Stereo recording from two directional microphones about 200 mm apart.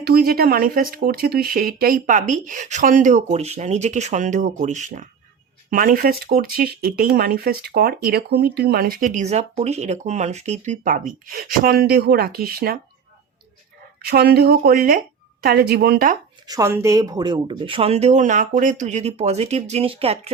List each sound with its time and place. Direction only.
0.0 s speech: 50° right (ahead or behind)
14.0 s speech: 55° right (ahead or behind)
16.5 s speech: 15° right (ahead or behind)